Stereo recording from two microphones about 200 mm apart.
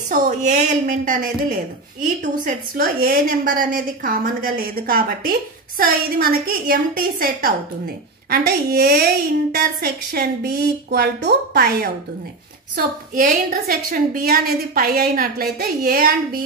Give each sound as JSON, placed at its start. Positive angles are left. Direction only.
{"t": 0.1, "sound": "a woman's voice", "side_deg": -35}
{"t": 12.7, "sound": "a woman's voice", "side_deg": -40}